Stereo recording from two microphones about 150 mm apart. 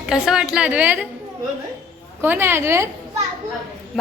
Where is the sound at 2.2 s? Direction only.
15° right (ahead or behind).